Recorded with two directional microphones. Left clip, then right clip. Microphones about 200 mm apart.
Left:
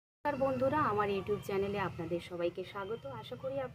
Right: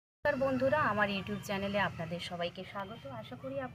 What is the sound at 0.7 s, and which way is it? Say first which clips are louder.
Speech: right 1 dB; 50° left (ahead or behind).